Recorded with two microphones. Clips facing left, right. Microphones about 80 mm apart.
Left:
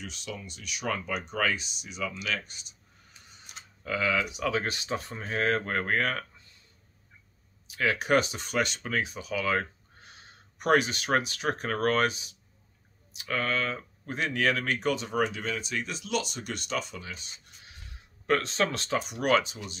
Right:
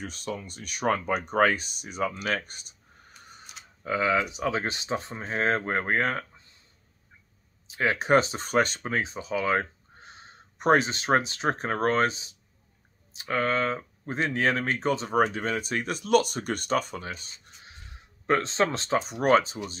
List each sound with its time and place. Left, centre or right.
0.0 s speech: right
3.8 s speech: right
7.6 s speech: right
17.6 s speech: right